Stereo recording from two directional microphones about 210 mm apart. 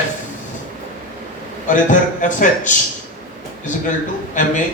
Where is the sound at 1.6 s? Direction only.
35° left (ahead or behind).